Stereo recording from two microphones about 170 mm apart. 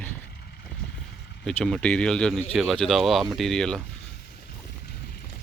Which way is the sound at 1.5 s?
5° left (ahead or behind).